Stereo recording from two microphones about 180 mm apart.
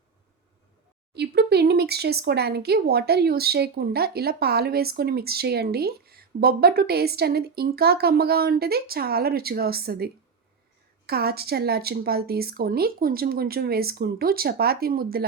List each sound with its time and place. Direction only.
1.1 s speech: 65° right (ahead or behind)